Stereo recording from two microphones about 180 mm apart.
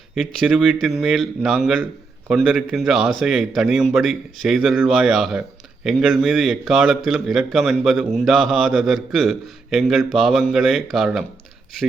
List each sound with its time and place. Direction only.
0.2 s a man's voice: centre (ahead or behind)